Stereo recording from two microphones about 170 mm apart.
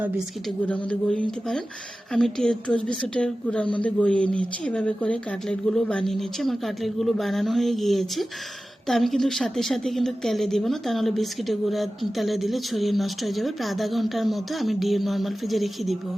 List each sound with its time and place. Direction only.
0.4 s a woman's voice: 5° left (ahead or behind)